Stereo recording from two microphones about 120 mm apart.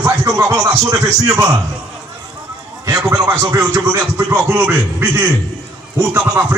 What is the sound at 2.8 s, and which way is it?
Speech, 25° right (ahead or behind).